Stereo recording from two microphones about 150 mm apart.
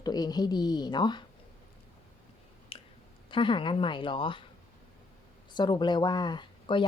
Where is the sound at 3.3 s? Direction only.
35° left (ahead or behind).